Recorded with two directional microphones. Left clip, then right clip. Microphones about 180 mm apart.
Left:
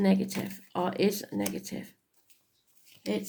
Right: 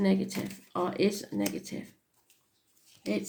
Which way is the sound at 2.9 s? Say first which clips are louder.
Left 3 dB; 30° left (ahead or behind).